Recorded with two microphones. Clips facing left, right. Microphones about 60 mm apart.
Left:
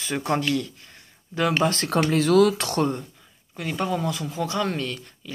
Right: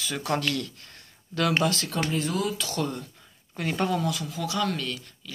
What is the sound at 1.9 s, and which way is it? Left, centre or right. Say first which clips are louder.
Speech: left 8 dB; left.